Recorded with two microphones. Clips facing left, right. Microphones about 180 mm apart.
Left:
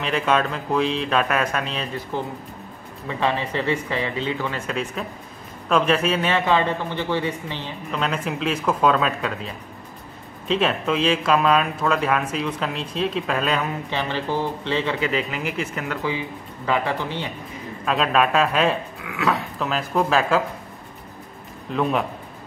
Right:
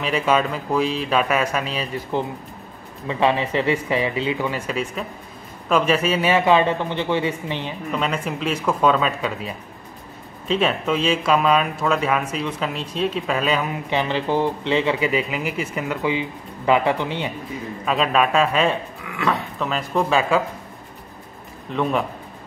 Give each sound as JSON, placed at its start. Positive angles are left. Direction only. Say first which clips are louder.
{"t": 0.0, "sound": "speech", "louder": "right 1 dB", "side_deg": -5}
{"t": 3.2, "sound": "speech", "louder": "right 4 dB", "side_deg": -15}
{"t": 7.9, "sound": "speech", "louder": "right 1 dB", "side_deg": 0}
{"t": 10.5, "sound": "speech", "louder": "right 1 dB", "side_deg": 0}
{"t": 13.8, "sound": "speech", "louder": "right 4 dB", "side_deg": -15}
{"t": 17.8, "sound": "speech", "louder": "even", "side_deg": 0}